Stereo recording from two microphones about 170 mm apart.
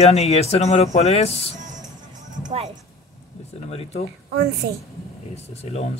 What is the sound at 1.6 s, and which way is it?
Music, 45° right (ahead or behind).